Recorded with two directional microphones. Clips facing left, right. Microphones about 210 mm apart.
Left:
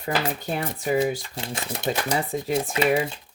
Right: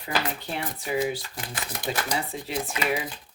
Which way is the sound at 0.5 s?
45° left (ahead or behind).